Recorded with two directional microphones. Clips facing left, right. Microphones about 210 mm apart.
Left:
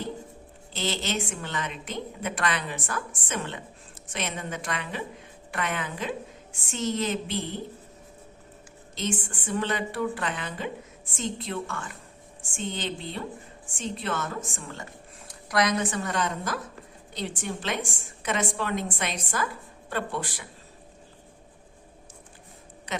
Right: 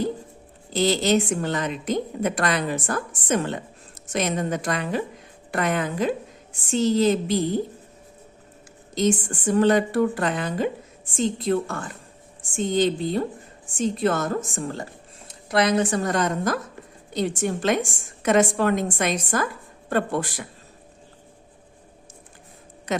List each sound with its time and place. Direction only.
0.7 s a woman's voice: 40° right (ahead or behind)
9.0 s a woman's voice: 40° right (ahead or behind)